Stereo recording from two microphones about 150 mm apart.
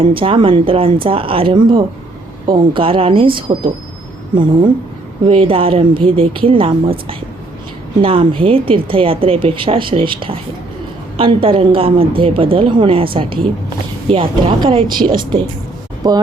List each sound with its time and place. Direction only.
0.2 s speech: 35° right (ahead or behind)
14.1 s speech: 35° right (ahead or behind)